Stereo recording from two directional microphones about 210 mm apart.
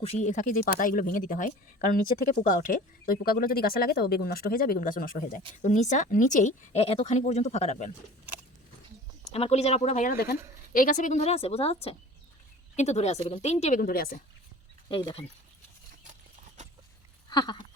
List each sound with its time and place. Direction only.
0.0 s a woman's voice: 30° left (ahead or behind)
9.2 s a woman's voice: 30° left (ahead or behind)
14.8 s speech: 25° left (ahead or behind)
16.6 s clip-clop: 35° right (ahead or behind)
17.2 s a sound: 20° left (ahead or behind)